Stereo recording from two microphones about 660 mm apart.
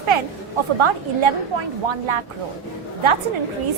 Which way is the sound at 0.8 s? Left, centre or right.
Right.